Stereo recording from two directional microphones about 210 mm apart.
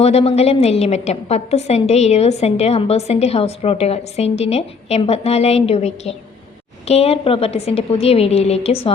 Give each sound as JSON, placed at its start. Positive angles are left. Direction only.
{"t": 0.0, "sound": "a woman's voice", "side_deg": 30}